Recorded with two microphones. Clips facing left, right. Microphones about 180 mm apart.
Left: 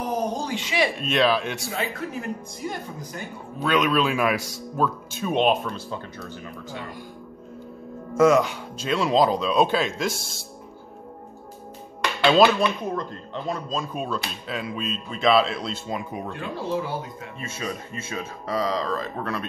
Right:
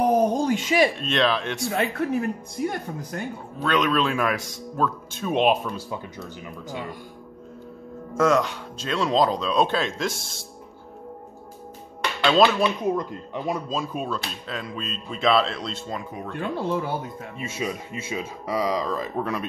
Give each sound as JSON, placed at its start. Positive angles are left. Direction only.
{"t": 0.0, "sound": "a sound", "side_deg": -55}
{"t": 0.9, "sound": "speech", "side_deg": 5}
{"t": 1.7, "sound": "speech", "side_deg": -55}
{"t": 3.6, "sound": "speech", "side_deg": 5}
{"t": 8.2, "sound": "speech", "side_deg": 5}
{"t": 12.2, "sound": "speech", "side_deg": 10}
{"t": 12.5, "sound": "speech", "side_deg": -10}
{"t": 16.3, "sound": "speech", "side_deg": -55}
{"t": 17.4, "sound": "speech", "side_deg": -15}